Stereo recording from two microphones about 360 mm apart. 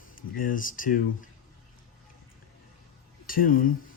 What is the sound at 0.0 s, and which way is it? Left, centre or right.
Speech, left.